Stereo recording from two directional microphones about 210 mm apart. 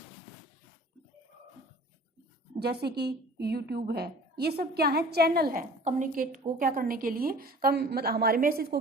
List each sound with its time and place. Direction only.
2.6 s a woman's voice: 50° right (ahead or behind)